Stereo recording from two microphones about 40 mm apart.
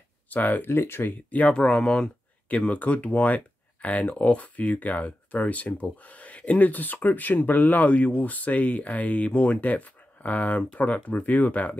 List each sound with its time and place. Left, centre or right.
0.3 s speech: left
0.7 s speech: left
1.0 s speech: left
1.5 s speech: left
2.4 s speech: left